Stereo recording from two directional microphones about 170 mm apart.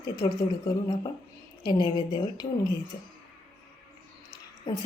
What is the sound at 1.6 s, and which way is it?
Speech, 25° left (ahead or behind).